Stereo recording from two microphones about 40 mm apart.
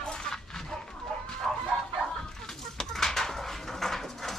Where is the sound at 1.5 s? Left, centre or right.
Centre.